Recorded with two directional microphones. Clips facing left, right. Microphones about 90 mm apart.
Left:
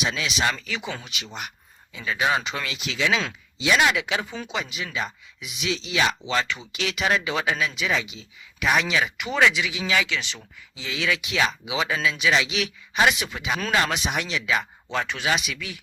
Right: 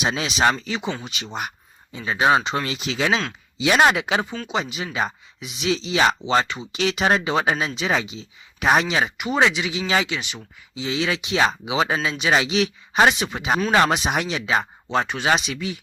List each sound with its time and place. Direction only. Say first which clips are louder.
0.0 s speech: right 5 dB; 40° right (ahead or behind)
9.1 s speech: even; 20° right (ahead or behind)
10.2 s speech: right 1 dB; 20° right (ahead or behind)